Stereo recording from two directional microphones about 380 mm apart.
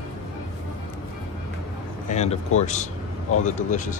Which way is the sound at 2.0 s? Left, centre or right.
Centre.